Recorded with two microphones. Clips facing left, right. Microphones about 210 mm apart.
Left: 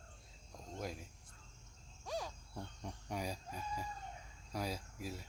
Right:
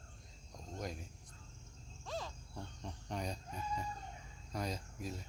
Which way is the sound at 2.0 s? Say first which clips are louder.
Left 1 dB; 10° left (ahead or behind).